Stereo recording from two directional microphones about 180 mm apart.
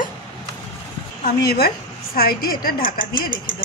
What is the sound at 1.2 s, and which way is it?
A woman's voice, 60° left (ahead or behind).